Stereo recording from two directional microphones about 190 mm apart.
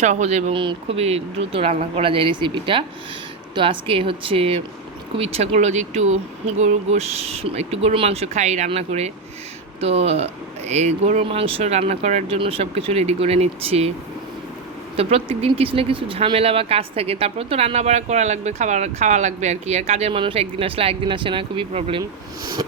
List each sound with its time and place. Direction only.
0.0 s a woman's voice: 35° right (ahead or behind)
14.9 s speech: 30° right (ahead or behind)